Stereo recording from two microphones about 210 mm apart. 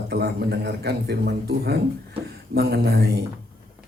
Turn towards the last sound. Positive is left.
turn(degrees=-50)  # may be behind; listen again after turning